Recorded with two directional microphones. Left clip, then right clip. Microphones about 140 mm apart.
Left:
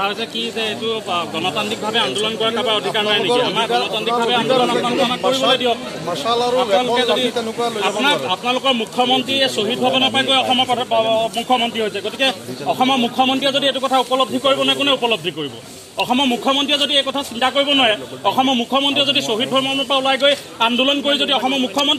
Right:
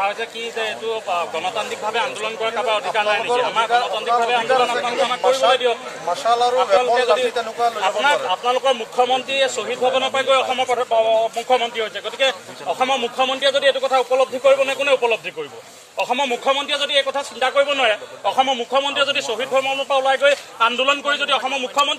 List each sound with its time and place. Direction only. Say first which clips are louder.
0.6 s a man's voice: even; 20° right (ahead or behind)
7.0 s a man's voice: even; 15° right (ahead or behind)
19.6 s speech: left 1 dB; 5° right (ahead or behind); by 21.9 s 20° right (ahead or behind)